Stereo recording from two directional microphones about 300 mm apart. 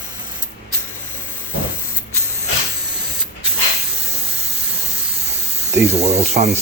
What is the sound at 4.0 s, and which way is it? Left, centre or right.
Steam, right.